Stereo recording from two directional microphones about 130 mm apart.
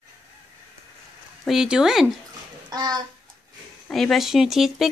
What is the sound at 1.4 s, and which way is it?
Speech, 5° right (ahead or behind).